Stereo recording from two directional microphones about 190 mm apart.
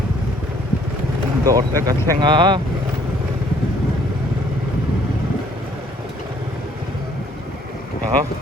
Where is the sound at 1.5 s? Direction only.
20° right (ahead or behind).